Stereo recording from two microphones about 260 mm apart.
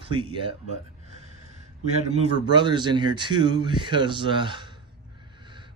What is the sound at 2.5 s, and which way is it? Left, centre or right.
A man's voice, centre.